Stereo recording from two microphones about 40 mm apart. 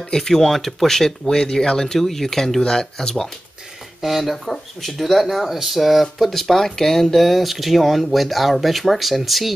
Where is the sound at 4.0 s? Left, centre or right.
Centre.